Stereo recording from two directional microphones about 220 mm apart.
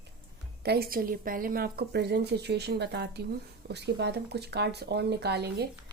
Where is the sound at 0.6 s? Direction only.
45° right (ahead or behind).